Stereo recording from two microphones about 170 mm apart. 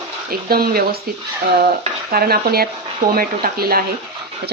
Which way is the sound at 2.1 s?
60° right (ahead or behind).